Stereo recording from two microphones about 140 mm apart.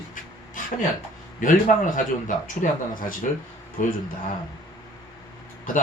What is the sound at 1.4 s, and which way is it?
Speech, 70° left (ahead or behind).